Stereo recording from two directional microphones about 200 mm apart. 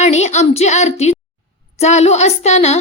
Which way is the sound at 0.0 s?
35° left (ahead or behind).